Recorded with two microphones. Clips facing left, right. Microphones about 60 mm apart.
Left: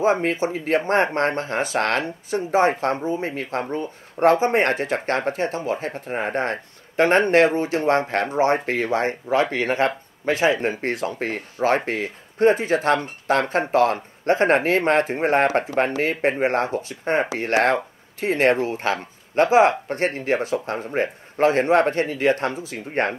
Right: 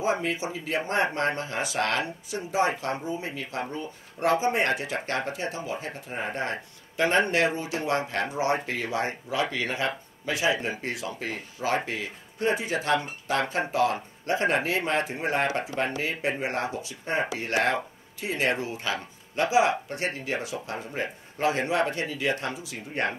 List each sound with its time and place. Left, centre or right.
0.0 s speech: left